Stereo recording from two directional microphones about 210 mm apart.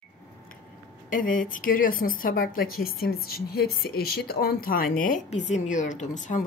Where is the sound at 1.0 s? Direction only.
40° left (ahead or behind).